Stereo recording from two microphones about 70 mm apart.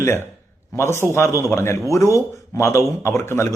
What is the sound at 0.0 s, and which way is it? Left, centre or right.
A man's voice, left.